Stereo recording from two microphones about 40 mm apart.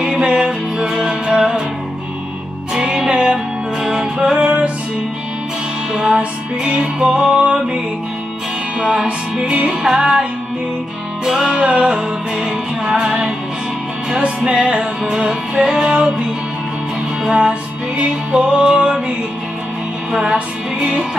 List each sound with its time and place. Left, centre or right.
0.0 s music: right
2.7 s music: centre
3.1 s music: right
3.8 s music: centre
4.4 s music: right
5.9 s music: right
8.7 s music: right
11.2 s music: centre
11.6 s music: right
17.3 s music: right